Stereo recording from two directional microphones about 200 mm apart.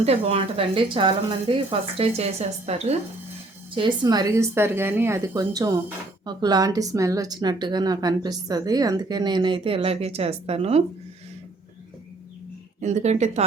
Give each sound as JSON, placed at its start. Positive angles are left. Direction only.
{"t": 0.0, "sound": "a woman's voice", "side_deg": -30}
{"t": 12.8, "sound": "speech", "side_deg": -35}